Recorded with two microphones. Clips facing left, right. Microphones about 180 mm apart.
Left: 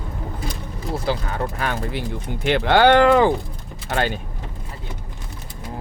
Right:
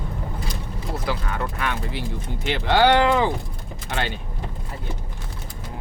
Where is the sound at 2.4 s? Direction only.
60° left (ahead or behind).